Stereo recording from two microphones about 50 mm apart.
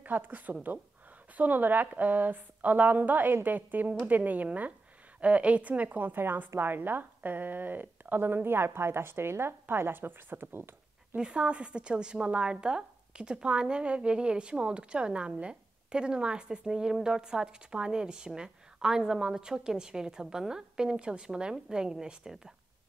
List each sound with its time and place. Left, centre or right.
0.0 s a woman's voice: right
11.1 s a woman's voice: centre